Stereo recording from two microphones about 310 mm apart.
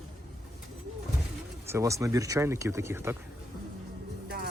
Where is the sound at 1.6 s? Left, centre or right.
Centre.